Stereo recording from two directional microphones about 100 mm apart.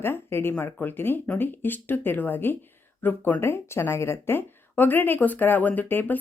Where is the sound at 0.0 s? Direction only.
25° left (ahead or behind).